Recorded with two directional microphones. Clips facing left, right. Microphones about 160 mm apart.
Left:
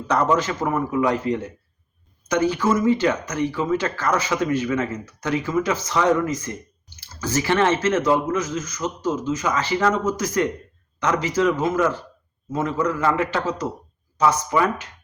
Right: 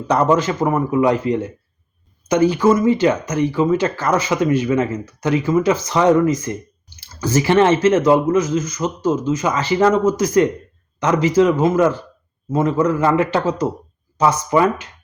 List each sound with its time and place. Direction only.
0.1 s speech: 20° right (ahead or behind)